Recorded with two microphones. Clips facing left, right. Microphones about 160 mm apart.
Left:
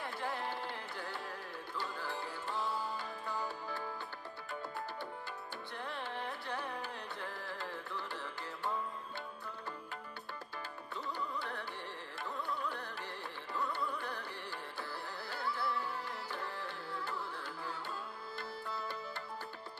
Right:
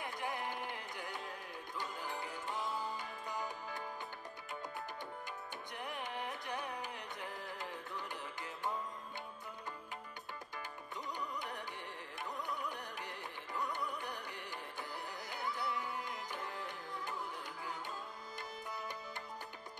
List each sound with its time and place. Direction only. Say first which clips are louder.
0.0 s music: left 1 dB; 20° right (ahead or behind)
5.8 s carnatic music: left 1 dB; 15° right (ahead or behind)
11.1 s carnatic music: left 1 dB; 15° right (ahead or behind)
14.8 s music: left 1 dB; 20° right (ahead or behind)
18.7 s music: left 3 dB; 15° right (ahead or behind)